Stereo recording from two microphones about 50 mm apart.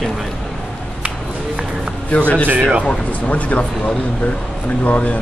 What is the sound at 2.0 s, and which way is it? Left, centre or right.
A man's voice, left.